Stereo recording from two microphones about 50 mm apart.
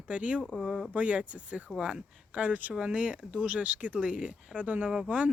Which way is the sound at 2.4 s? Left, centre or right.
Right.